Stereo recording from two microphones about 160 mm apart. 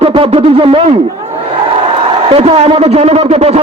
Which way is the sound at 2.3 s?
40° right (ahead or behind).